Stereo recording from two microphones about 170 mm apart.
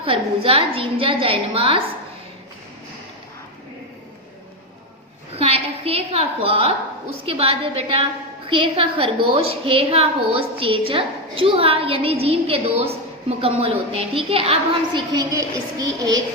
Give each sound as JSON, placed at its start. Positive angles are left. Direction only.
{"t": 0.0, "sound": "a woman's voice", "side_deg": -30}
{"t": 5.4, "sound": "a woman's voice", "side_deg": -35}